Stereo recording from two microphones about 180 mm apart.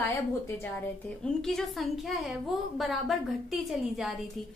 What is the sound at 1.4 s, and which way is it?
A woman's voice, centre (ahead or behind).